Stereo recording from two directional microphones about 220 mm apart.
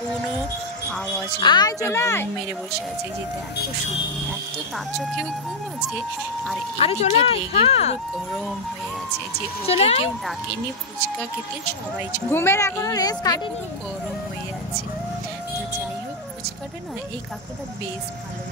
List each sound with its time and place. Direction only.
1.4 s speech: 20° left (ahead or behind)
4.7 s speech: centre (ahead or behind)
6.8 s speech: 30° left (ahead or behind)
9.7 s speech: 25° left (ahead or behind)
12.3 s speech: 10° left (ahead or behind)